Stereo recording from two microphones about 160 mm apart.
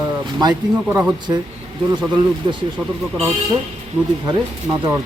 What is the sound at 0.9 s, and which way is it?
Speech, 15° right (ahead or behind).